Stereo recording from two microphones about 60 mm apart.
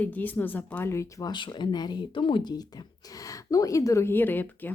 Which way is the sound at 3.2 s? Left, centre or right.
Left.